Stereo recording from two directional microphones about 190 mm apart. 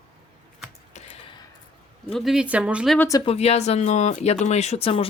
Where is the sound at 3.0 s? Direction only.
15° left (ahead or behind).